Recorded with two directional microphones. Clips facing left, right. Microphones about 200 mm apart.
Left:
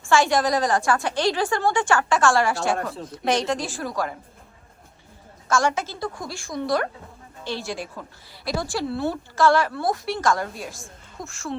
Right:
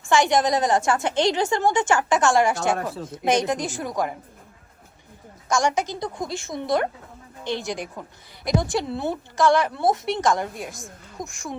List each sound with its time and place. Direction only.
0.1 s a woman's voice: 20° right (ahead or behind)
2.7 s speech: centre (ahead or behind)
3.1 s a woman's voice: 20° right (ahead or behind)
5.5 s a woman's voice: 15° right (ahead or behind)